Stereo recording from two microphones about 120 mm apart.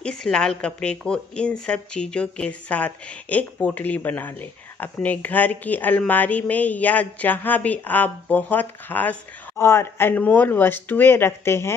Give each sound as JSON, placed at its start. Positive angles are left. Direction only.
{"t": 0.0, "sound": "a woman's voice", "side_deg": 5}